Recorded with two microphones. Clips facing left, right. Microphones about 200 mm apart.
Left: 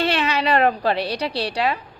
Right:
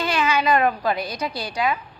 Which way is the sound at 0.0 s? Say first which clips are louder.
Left 1 dB; 35° left (ahead or behind).